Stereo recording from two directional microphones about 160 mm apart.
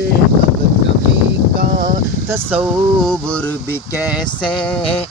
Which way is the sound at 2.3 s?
10° right (ahead or behind).